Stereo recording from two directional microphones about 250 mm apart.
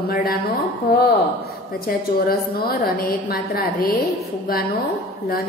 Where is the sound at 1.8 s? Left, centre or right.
Left.